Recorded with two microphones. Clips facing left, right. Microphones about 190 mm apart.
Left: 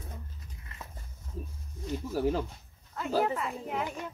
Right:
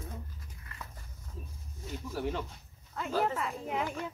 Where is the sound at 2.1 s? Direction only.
35° left (ahead or behind).